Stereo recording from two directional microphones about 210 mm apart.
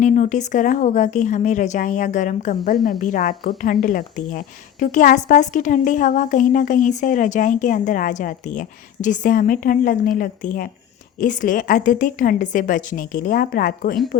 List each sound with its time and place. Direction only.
0.0 s a woman's voice: 35° left (ahead or behind)